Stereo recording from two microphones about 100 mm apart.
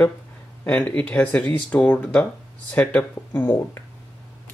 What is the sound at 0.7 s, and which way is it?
Speech, 15° left (ahead or behind).